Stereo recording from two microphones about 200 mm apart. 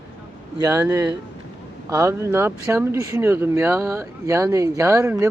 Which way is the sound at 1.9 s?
15° right (ahead or behind).